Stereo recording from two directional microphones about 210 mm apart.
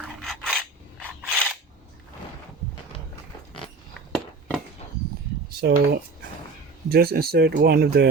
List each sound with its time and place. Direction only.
0.0 s filing: centre (ahead or behind)
4.1 s a sound: centre (ahead or behind)
5.5 s speech: 50° right (ahead or behind)